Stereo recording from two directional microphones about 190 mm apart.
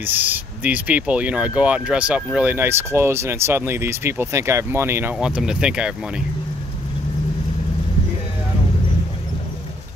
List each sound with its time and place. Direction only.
0.0 s speech: 10° right (ahead or behind)